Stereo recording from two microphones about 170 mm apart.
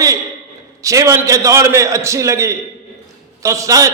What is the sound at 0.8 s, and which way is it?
A man's voice, 20° right (ahead or behind).